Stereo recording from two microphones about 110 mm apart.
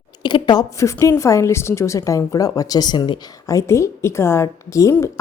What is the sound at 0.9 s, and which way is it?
A woman's voice, 25° left (ahead or behind).